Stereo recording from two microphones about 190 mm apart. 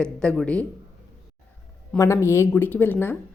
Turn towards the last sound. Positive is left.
turn(degrees=10)  # may be behind; listen again after turning